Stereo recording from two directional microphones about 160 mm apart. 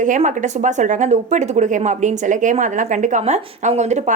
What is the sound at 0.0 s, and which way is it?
Speech, 50° right (ahead or behind).